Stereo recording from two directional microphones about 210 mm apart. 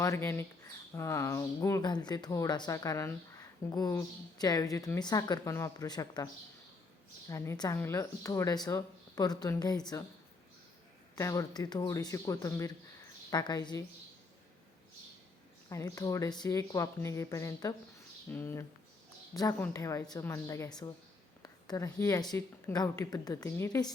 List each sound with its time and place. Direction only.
0.0 s speech: 15° left (ahead or behind)
7.3 s speech: 15° left (ahead or behind)
11.1 s speech: 15° left (ahead or behind)
15.7 s speech: 15° left (ahead or behind)